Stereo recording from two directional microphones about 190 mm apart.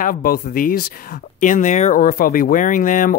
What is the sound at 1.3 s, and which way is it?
Speech, 40° left (ahead or behind).